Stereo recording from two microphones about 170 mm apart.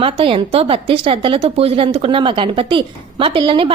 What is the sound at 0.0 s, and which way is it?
Speech, 35° right (ahead or behind).